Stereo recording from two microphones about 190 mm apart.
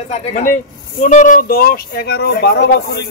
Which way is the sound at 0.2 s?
40° left (ahead or behind).